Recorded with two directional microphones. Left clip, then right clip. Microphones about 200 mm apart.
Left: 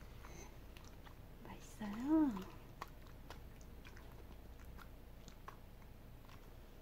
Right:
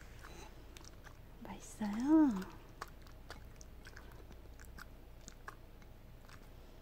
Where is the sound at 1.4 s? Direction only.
40° right (ahead or behind).